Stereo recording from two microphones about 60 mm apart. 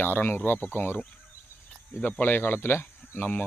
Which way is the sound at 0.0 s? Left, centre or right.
Left.